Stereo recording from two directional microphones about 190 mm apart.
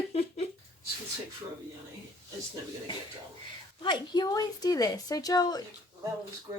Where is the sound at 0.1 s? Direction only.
30° left (ahead or behind).